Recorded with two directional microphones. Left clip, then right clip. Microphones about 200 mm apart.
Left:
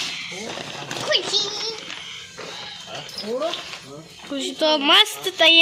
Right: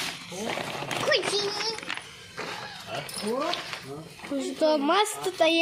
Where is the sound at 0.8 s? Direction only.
30° left (ahead or behind).